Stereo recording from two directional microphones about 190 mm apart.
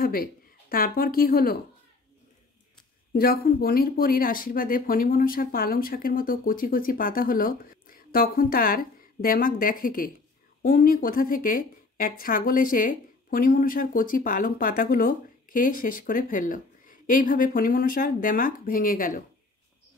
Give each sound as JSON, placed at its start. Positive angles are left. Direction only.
{"t": 0.0, "sound": "speech", "side_deg": 50}
{"t": 3.2, "sound": "speech", "side_deg": 50}